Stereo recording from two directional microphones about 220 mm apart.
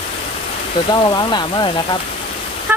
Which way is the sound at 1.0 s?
20° left (ahead or behind).